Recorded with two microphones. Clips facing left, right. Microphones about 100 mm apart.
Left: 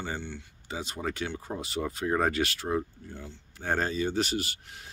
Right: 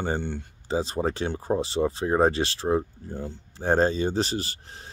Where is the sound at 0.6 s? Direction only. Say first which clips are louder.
Right 8 dB; 35° right (ahead or behind).